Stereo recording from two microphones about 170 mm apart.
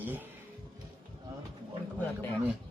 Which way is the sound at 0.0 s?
10° right (ahead or behind).